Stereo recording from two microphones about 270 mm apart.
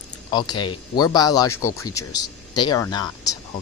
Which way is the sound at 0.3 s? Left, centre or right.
Centre.